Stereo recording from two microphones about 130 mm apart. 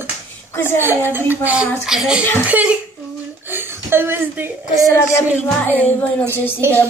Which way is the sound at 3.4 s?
15° right (ahead or behind).